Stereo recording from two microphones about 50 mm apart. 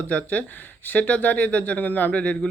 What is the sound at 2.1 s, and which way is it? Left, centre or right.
Speech, left.